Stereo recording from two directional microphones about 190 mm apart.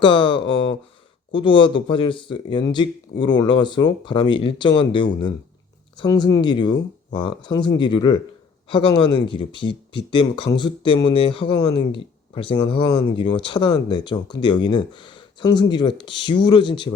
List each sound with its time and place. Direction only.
0.0 s speech: 25° left (ahead or behind)